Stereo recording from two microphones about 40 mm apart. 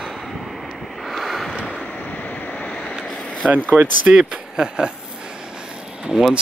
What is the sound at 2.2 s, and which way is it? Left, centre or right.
Waves, left.